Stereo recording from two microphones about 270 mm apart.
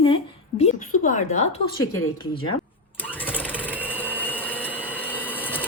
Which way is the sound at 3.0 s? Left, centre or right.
Centre.